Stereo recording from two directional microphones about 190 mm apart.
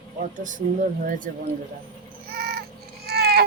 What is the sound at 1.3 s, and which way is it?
Speech, 50° right (ahead or behind).